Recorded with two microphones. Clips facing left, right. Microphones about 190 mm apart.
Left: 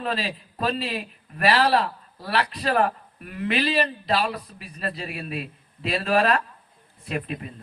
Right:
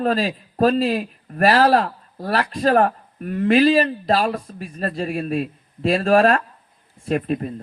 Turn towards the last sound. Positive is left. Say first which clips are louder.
# right 9 dB
turn(degrees=-40)  # may be behind; listen again after turning